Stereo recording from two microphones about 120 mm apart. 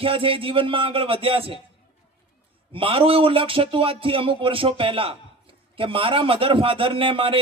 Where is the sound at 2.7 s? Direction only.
50° right (ahead or behind).